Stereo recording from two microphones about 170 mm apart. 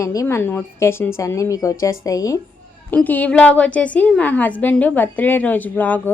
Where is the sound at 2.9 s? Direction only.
10° left (ahead or behind).